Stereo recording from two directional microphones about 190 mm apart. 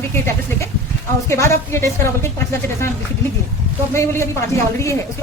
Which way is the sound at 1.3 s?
15° left (ahead or behind).